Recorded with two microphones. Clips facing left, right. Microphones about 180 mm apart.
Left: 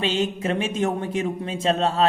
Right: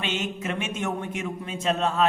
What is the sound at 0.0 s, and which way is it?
Speech, 30° left (ahead or behind).